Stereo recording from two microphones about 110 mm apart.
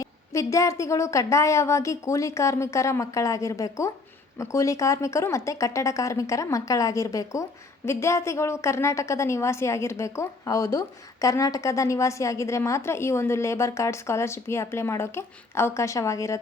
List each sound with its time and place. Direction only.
0.0 s a woman's voice: 30° left (ahead or behind)